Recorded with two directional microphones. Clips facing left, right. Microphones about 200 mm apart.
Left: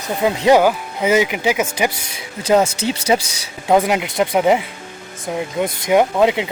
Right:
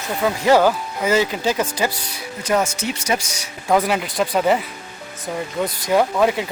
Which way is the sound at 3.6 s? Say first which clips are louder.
Left 3 dB; 20° left (ahead or behind).